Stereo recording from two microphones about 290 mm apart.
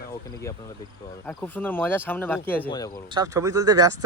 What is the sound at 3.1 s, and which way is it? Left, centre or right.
Speech, centre.